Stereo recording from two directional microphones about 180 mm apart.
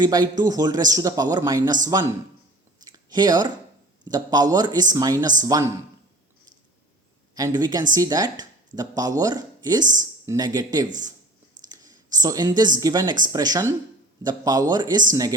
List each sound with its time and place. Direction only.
0.0 s speech: 20° right (ahead or behind)
2.8 s chewing: 20° right (ahead or behind)
4.0 s speech: 20° right (ahead or behind)
7.3 s speech: 20° right (ahead or behind)
11.7 s a sound: 20° right (ahead or behind)
12.2 s speech: 20° right (ahead or behind)